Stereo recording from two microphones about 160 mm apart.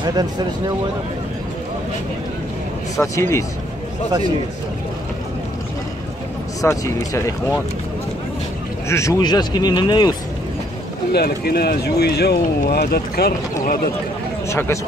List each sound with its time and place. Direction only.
0.1 s speech: 25° right (ahead or behind)
3.0 s speech: 15° left (ahead or behind)
6.6 s speech: 20° left (ahead or behind)
8.8 s speech: 20° left (ahead or behind)
11.1 s speech: 85° left
14.5 s speech: 15° left (ahead or behind)